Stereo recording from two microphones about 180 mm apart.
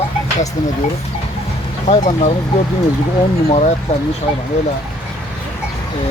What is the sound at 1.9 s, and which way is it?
Speech, 35° left (ahead or behind).